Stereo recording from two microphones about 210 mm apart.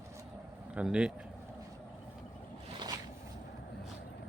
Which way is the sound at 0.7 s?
5° right (ahead or behind).